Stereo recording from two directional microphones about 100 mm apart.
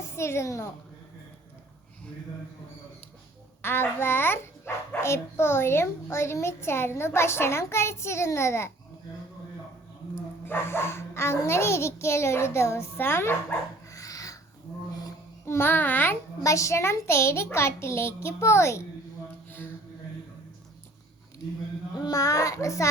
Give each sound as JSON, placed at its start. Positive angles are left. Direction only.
{"t": 0.1, "sound": "a woman's voice", "side_deg": 25}
{"t": 3.6, "sound": "a child's voice", "side_deg": 25}
{"t": 10.4, "sound": "a child's voice", "side_deg": 25}
{"t": 15.4, "sound": "a child's voice", "side_deg": 25}
{"t": 16.4, "sound": "a child's voice", "side_deg": 30}
{"t": 22.0, "sound": "a child's voice", "side_deg": 35}